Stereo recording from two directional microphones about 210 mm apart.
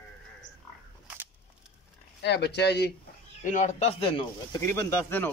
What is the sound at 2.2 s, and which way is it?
Speech, 55° left (ahead or behind).